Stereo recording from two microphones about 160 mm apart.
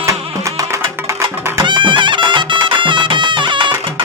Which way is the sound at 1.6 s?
30° right (ahead or behind).